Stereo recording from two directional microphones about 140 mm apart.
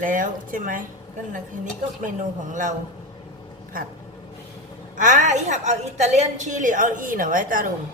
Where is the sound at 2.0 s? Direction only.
65° right (ahead or behind).